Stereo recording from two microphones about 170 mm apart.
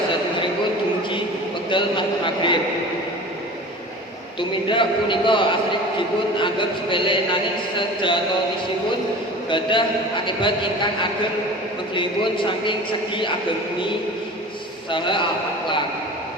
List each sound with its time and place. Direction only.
1.7 s a man's voice: 30° left (ahead or behind)
4.4 s a man's voice: 30° left (ahead or behind)
9.5 s a man's voice: 30° left (ahead or behind)
11.9 s a man's voice: 30° left (ahead or behind)
14.8 s a man's voice: 30° left (ahead or behind)